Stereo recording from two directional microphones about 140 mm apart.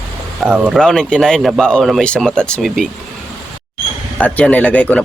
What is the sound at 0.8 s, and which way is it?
Speech, 5° left (ahead or behind).